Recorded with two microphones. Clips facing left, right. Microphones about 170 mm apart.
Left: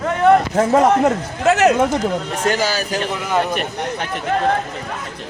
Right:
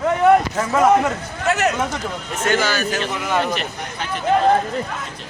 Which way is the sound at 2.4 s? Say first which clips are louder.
Right 1 dB; 35° left (ahead or behind).